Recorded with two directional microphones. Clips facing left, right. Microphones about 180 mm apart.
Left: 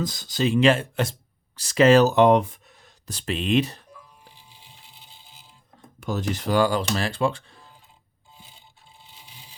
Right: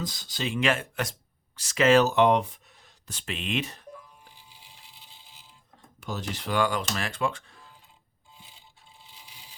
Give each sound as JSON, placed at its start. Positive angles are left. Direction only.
{"t": 0.0, "sound": "speech", "side_deg": 45}
{"t": 3.1, "sound": "speech", "side_deg": 35}
{"t": 6.0, "sound": "speech", "side_deg": 50}